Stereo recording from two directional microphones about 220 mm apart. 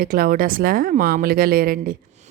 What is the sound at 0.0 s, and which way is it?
A woman's voice, 40° right (ahead or behind).